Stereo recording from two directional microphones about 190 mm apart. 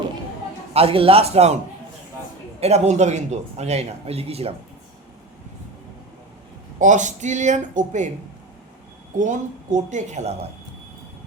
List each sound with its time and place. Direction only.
0.7 s a man's voice: 30° right (ahead or behind)
2.6 s a man's voice: 35° right (ahead or behind)
6.7 s a man's voice: 40° right (ahead or behind)
9.1 s a man's voice: 40° right (ahead or behind)